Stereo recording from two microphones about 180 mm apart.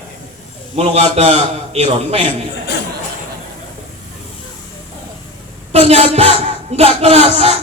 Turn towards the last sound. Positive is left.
turn(degrees=-35)  # may be behind; listen again after turning